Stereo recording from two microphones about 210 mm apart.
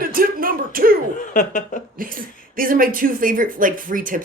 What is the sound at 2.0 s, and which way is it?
Speech, 40° right (ahead or behind).